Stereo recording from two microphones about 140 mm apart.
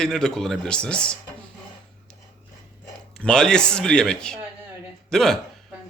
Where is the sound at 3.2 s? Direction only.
5° left (ahead or behind).